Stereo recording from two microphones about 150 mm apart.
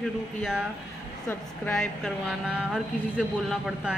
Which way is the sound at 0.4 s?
5° right (ahead or behind).